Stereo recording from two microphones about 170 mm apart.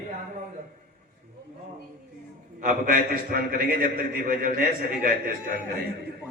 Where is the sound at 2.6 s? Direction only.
50° right (ahead or behind).